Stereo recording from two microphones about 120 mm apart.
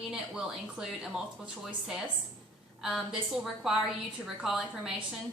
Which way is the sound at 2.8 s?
5° right (ahead or behind).